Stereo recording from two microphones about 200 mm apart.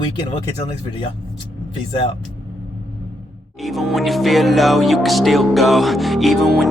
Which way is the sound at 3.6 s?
Centre (ahead or behind).